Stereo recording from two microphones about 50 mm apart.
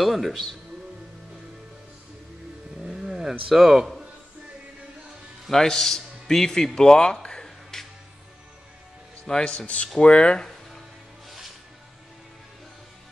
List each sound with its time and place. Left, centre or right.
0.0 s speech: centre
2.8 s a sound: centre
5.5 s speech: centre
9.3 s a man's voice: centre